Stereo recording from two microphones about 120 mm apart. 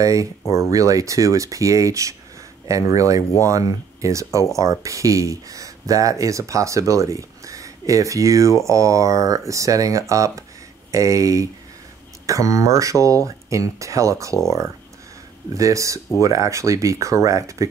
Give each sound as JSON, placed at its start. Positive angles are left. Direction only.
{"t": 0.0, "sound": "speech", "side_deg": -25}
{"t": 15.5, "sound": "speech", "side_deg": -25}